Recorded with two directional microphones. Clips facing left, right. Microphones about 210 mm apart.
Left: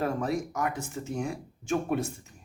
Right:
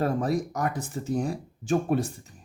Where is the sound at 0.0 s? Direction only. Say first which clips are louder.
Right 3 dB; 35° right (ahead or behind).